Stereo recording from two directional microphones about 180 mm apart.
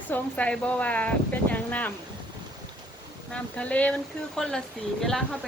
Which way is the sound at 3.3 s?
5° left (ahead or behind).